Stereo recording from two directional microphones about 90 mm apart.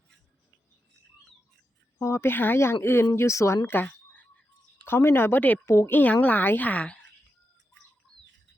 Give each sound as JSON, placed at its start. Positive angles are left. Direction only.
{"t": 2.0, "sound": "speech", "side_deg": 30}
{"t": 3.7, "sound": "a sound", "side_deg": 20}
{"t": 4.9, "sound": "speech", "side_deg": 25}